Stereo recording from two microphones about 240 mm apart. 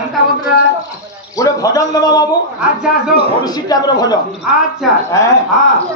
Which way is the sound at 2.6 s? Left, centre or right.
Centre.